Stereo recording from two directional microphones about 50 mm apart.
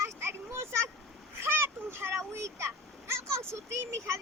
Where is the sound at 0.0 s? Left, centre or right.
Right.